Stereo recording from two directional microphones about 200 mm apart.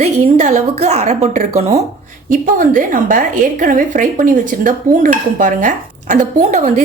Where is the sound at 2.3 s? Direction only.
45° right (ahead or behind).